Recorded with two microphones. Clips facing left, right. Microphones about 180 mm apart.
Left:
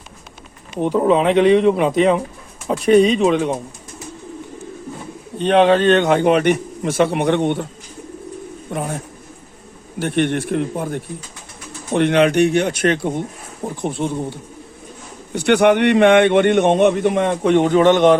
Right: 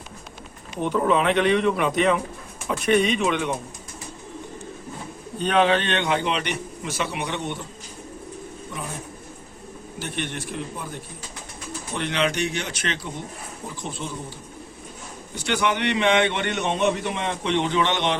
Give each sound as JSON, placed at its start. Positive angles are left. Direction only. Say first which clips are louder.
{"t": 0.8, "sound": "speech", "louder": "left 6 dB", "side_deg": 30}
{"t": 5.4, "sound": "a man's voice", "louder": "left 7 dB", "side_deg": 35}
{"t": 8.7, "sound": "speech", "louder": "left 11 dB", "side_deg": 60}
{"t": 10.0, "sound": "a man's voice", "louder": "left 13 dB", "side_deg": 60}